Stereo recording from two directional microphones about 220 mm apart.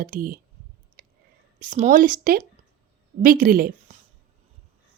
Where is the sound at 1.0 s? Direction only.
40° right (ahead or behind).